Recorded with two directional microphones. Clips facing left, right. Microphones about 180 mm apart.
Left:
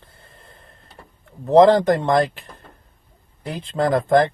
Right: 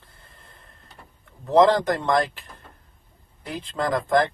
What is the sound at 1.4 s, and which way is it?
Speech, 40° left (ahead or behind).